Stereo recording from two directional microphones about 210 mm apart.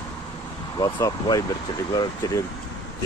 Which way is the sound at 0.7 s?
20° left (ahead or behind).